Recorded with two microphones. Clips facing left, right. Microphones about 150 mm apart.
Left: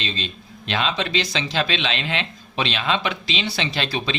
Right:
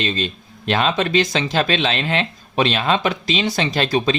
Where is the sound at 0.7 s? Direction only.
45° right (ahead or behind).